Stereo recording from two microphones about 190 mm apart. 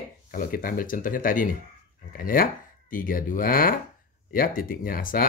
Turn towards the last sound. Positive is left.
turn(degrees=50)  # may be behind; listen again after turning